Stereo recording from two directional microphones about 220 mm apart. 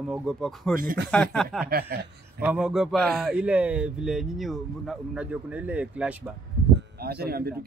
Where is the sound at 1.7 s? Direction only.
45° right (ahead or behind).